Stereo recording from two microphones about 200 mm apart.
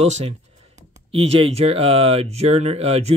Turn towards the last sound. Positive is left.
turn(degrees=-30)  # may be behind; listen again after turning